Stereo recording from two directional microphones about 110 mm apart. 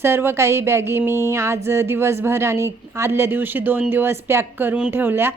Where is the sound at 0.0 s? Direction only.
20° right (ahead or behind).